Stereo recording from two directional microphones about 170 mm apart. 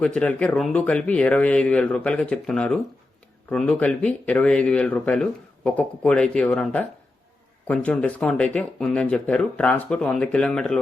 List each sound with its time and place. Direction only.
0.0 s speech: 5° left (ahead or behind)